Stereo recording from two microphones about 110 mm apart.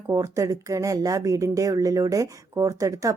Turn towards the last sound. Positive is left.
turn(degrees=-30)  # may be behind; listen again after turning